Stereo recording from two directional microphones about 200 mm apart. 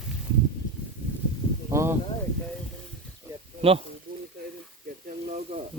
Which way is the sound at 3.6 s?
30° right (ahead or behind).